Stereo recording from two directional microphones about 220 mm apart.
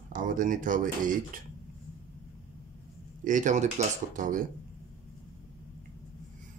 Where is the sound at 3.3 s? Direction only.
35° right (ahead or behind).